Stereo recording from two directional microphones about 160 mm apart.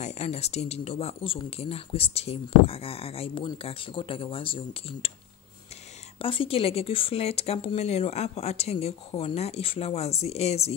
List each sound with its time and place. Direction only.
0.0 s speech: 45° left (ahead or behind)
6.1 s speech: 35° left (ahead or behind)